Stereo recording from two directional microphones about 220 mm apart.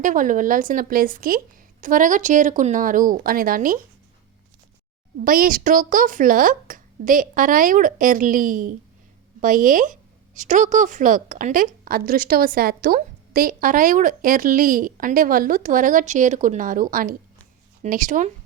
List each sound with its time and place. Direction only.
0.0 s a woman's voice: 35° right (ahead or behind)
5.2 s a woman's voice: 40° right (ahead or behind)